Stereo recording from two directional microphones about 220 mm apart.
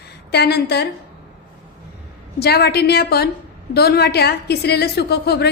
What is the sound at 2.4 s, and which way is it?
A woman's voice, 45° left (ahead or behind).